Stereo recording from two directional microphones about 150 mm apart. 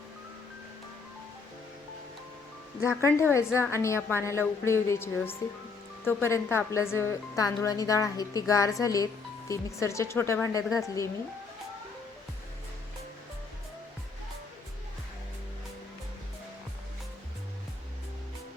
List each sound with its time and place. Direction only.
2.8 s a woman's voice: 20° left (ahead or behind)